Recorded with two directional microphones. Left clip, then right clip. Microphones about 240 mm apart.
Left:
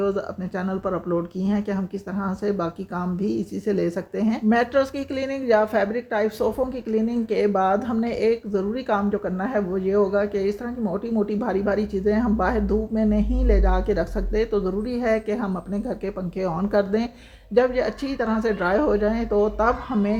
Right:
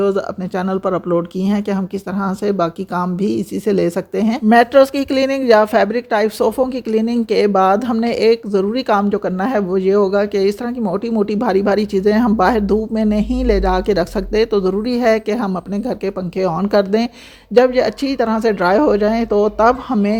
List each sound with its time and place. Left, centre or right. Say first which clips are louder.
0.0 s speech: right 8 dB; right